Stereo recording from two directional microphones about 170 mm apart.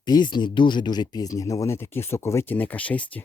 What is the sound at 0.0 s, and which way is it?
Speech, 25° left (ahead or behind).